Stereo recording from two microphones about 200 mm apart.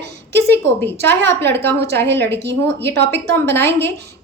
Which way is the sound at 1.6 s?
55° right (ahead or behind).